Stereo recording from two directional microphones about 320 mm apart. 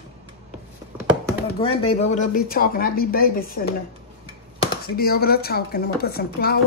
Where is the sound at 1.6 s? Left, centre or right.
Centre.